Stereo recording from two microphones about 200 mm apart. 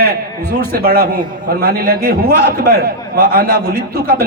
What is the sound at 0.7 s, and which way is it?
A man's voice, 50° right (ahead or behind).